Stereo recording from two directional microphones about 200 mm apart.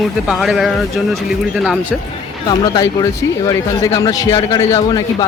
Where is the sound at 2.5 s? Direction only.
20° left (ahead or behind).